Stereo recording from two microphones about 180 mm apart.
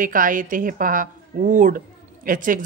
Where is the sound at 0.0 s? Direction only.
50° right (ahead or behind).